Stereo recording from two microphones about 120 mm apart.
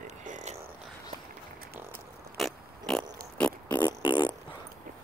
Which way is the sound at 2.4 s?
Centre (ahead or behind).